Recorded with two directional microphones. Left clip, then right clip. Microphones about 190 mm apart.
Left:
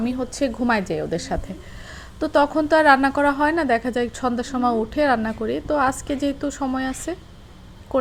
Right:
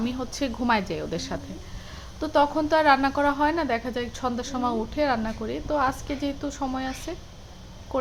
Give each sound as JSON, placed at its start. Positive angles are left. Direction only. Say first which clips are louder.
{"t": 0.0, "sound": "a woman's voice", "louder": "left 5 dB", "side_deg": 15}